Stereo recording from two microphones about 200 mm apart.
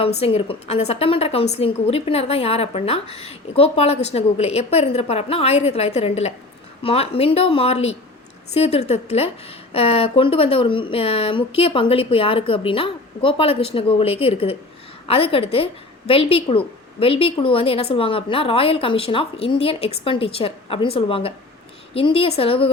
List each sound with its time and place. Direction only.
0.2 s a woman's voice: 30° left (ahead or behind)